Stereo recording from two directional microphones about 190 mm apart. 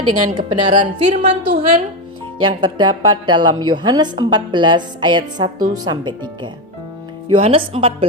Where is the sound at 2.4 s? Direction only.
25° right (ahead or behind).